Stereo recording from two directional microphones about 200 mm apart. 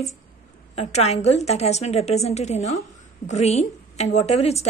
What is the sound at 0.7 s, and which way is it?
A woman's voice, 30° left (ahead or behind).